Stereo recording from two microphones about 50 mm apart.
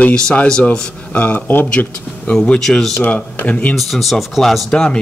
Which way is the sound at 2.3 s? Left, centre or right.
Centre.